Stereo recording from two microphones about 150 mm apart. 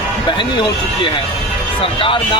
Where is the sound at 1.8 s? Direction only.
35° left (ahead or behind).